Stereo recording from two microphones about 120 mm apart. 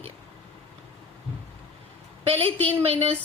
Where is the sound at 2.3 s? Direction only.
55° right (ahead or behind).